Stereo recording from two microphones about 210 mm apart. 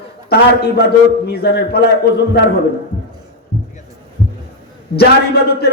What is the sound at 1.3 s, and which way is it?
Speech, 50° left (ahead or behind).